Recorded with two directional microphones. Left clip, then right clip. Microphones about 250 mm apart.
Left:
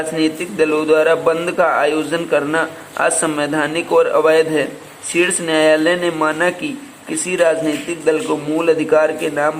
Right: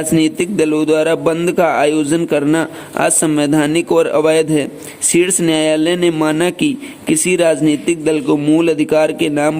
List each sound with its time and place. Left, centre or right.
0.2 s speech: right